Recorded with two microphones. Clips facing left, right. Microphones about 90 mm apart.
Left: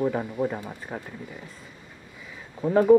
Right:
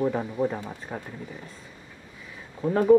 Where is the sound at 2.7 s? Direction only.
15° left (ahead or behind).